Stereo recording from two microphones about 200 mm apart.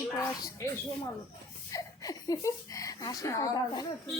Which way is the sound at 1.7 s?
15° left (ahead or behind).